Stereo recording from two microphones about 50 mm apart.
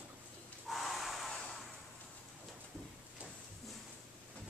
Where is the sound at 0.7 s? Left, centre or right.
Centre.